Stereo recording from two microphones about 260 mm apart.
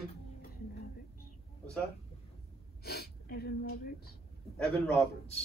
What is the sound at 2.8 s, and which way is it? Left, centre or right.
Gasp, left.